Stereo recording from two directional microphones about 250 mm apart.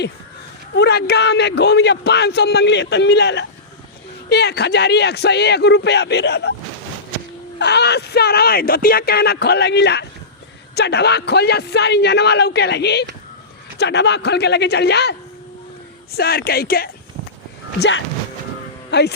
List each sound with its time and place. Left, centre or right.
0.8 s speech: left
7.6 s speech: left
16.1 s speech: left